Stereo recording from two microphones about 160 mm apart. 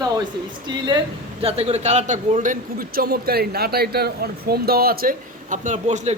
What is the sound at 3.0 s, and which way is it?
Speech, 75° right (ahead or behind).